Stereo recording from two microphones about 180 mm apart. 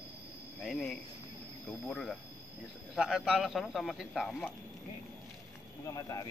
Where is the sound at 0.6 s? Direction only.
Centre (ahead or behind).